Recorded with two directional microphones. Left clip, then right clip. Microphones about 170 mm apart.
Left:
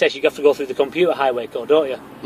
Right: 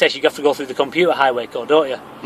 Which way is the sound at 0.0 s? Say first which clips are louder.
Even; 20° right (ahead or behind).